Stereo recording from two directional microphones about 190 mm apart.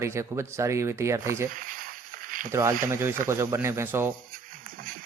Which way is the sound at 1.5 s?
45° right (ahead or behind).